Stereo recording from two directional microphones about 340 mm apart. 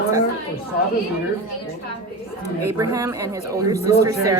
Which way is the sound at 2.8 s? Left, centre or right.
Centre.